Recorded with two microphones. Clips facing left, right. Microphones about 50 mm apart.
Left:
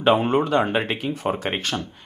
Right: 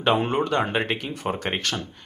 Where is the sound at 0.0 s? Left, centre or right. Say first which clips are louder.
Left 3 dB; centre.